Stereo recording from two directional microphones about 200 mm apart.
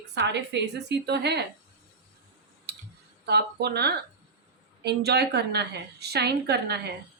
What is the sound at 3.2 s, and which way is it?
A woman's voice, 55° right (ahead or behind).